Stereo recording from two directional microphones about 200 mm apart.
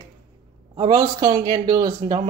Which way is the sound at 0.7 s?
15° right (ahead or behind).